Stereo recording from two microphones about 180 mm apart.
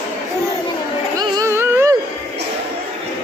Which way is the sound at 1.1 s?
20° right (ahead or behind).